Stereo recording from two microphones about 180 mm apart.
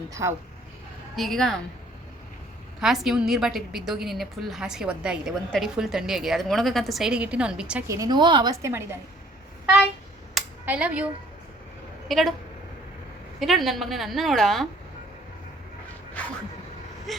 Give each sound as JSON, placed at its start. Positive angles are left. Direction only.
{"t": 0.1, "sound": "speech", "side_deg": -15}
{"t": 1.1, "sound": "a woman's voice", "side_deg": 0}
{"t": 2.8, "sound": "a woman's voice", "side_deg": 0}
{"t": 7.9, "sound": "a woman's voice", "side_deg": -20}
{"t": 10.3, "sound": "a sound", "side_deg": -5}
{"t": 12.0, "sound": "a woman's voice", "side_deg": 0}
{"t": 13.4, "sound": "a woman's voice", "side_deg": 0}
{"t": 17.1, "sound": "a woman's voice", "side_deg": 0}